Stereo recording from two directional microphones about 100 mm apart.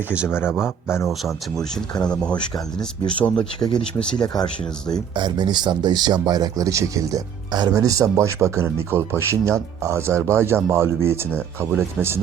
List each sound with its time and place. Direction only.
0.3 s speech: 20° left (ahead or behind)
1.0 s speech: centre (ahead or behind)
2.0 s speech: 10° left (ahead or behind)
2.3 s speech: 45° left (ahead or behind)
3.2 s speech: 10° left (ahead or behind)
3.6 s speech: 50° left (ahead or behind)
5.1 s speech: 50° right (ahead or behind); by 12.2 s 25° right (ahead or behind)